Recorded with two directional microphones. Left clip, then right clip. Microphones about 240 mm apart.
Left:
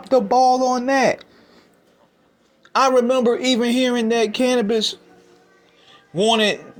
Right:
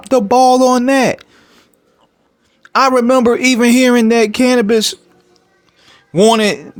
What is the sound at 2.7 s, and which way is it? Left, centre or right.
A man's voice, right.